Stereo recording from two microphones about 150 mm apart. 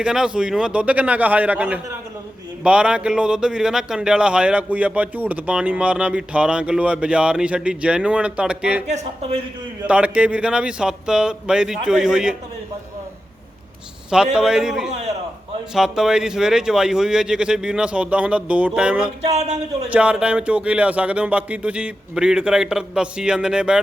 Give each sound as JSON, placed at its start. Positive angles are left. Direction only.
{"t": 0.0, "sound": "speech", "side_deg": -5}
{"t": 8.9, "sound": "speech", "side_deg": -50}
{"t": 9.8, "sound": "speech", "side_deg": -10}
{"t": 14.3, "sound": "speech", "side_deg": -5}
{"t": 19.2, "sound": "speech", "side_deg": -45}
{"t": 19.9, "sound": "speech", "side_deg": -5}